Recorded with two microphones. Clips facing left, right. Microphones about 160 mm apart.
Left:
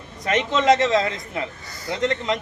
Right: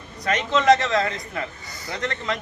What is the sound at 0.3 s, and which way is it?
A man's voice, 25° left (ahead or behind).